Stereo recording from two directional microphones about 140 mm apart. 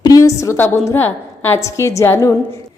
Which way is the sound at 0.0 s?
25° left (ahead or behind).